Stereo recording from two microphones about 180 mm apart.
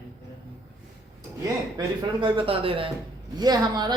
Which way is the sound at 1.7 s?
25° right (ahead or behind).